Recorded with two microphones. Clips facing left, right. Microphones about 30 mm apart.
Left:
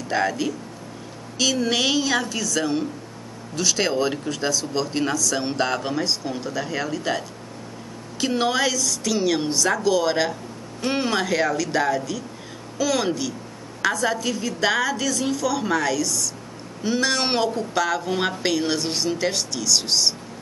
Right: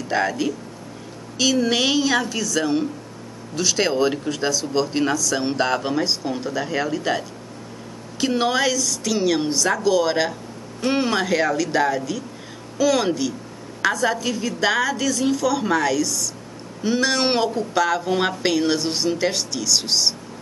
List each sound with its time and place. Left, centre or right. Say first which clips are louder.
0.1 s speech: right 1 dB; centre